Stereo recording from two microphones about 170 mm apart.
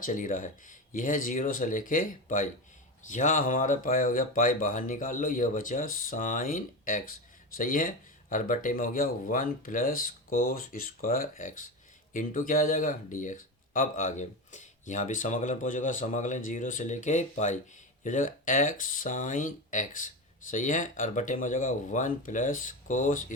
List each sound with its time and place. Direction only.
0.0 s speech: 50° left (ahead or behind)